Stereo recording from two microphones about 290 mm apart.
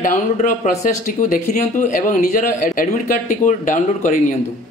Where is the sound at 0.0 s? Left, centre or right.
Left.